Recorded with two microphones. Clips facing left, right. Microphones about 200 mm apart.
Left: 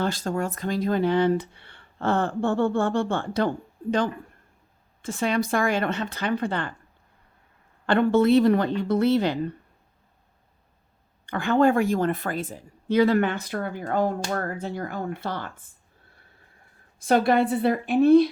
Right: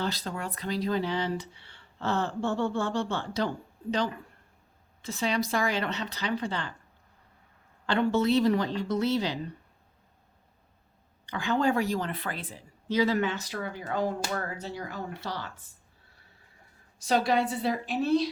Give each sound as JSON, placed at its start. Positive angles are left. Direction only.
{"t": 0.0, "sound": "speech", "side_deg": 50}
{"t": 5.0, "sound": "speech", "side_deg": 50}
{"t": 7.9, "sound": "a woman's voice", "side_deg": 55}
{"t": 11.3, "sound": "speech", "side_deg": 55}
{"t": 17.0, "sound": "a woman's voice", "side_deg": 55}